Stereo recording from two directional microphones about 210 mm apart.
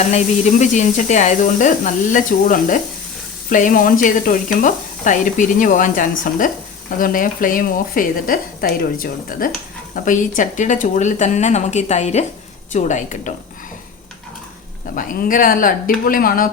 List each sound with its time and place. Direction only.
0.6 s speech: 35° left (ahead or behind)
14.9 s speech: 40° left (ahead or behind)